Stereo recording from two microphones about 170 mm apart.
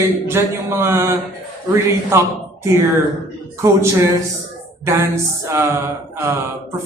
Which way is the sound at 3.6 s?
15° right (ahead or behind).